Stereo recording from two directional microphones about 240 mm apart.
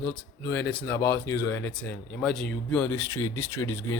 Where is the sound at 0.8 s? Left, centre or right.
Centre.